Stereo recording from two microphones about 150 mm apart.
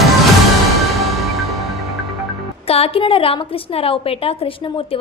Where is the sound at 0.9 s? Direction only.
Centre (ahead or behind).